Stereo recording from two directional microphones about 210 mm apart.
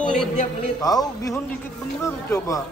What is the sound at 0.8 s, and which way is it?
A man's voice, 15° left (ahead or behind).